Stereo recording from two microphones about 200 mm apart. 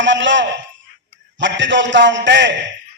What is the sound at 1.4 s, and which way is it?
A man's voice, 65° right (ahead or behind).